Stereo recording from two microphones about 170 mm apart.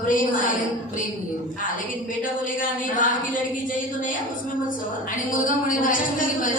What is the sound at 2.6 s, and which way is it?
Speech, 50° left (ahead or behind).